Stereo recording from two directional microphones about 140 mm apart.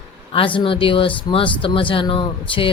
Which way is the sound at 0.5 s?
40° left (ahead or behind).